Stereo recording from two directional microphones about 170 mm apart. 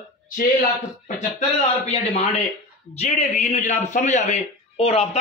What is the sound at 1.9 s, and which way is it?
A man's voice, 40° left (ahead or behind).